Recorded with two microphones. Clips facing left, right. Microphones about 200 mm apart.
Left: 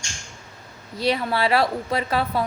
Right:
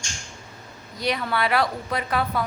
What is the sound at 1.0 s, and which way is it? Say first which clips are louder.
A woman's voice: left 3 dB; 30° left (ahead or behind).